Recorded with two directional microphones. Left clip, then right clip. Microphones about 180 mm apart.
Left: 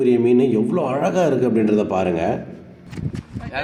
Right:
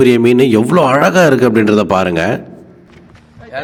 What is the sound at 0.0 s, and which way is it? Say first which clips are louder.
A man's voice: right 7 dB; 55° right (ahead or behind).